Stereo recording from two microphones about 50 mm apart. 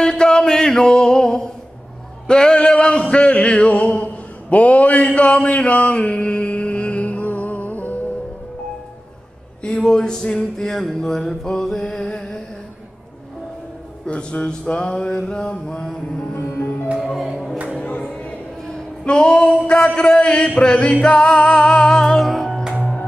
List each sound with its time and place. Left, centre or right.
0.0 s a sound: centre; by 8.0 s left
9.6 s a sound: centre
10.6 s mantra: centre
12.0 s music: centre
14.0 s mantra: centre
16.3 s music: left
17.0 s music: centre
17.7 s music: left
18.7 s speech: centre
22.5 s music: centre